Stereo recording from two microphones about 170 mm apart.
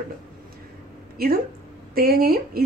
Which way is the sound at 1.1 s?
60° right (ahead or behind).